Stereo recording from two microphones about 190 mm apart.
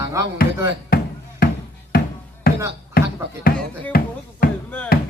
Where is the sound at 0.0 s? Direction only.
15° right (ahead or behind).